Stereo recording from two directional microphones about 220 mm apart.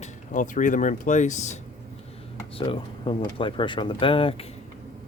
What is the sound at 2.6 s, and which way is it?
Speech, 25° left (ahead or behind).